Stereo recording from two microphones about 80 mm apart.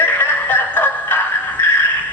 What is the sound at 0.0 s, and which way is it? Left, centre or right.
Music, left.